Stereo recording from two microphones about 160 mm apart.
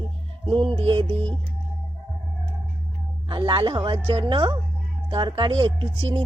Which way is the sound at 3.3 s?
30° right (ahead or behind).